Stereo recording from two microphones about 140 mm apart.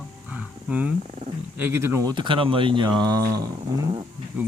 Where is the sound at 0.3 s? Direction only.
10° right (ahead or behind).